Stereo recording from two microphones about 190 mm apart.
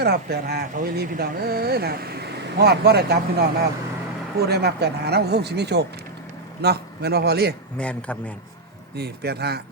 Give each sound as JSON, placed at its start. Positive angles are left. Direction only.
{"t": 0.0, "sound": "speech", "side_deg": -55}
{"t": 7.8, "sound": "a man's voice", "side_deg": 5}
{"t": 9.0, "sound": "speech", "side_deg": -60}